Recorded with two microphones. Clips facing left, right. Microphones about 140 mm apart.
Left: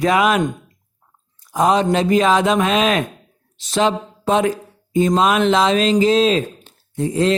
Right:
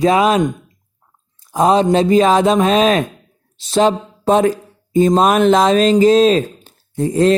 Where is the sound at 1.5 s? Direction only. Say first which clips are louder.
Right 3 dB; 30° right (ahead or behind).